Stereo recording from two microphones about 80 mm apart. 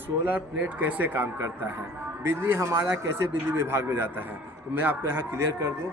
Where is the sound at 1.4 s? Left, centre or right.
Right.